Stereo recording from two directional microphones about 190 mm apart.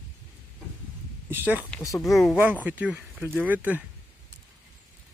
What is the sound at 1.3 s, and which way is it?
Speech, 10° right (ahead or behind).